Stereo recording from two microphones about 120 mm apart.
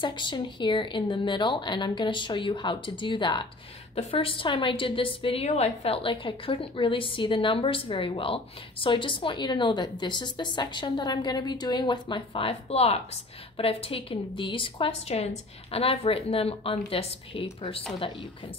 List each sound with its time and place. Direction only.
0.0 s a woman's voice: 40° left (ahead or behind)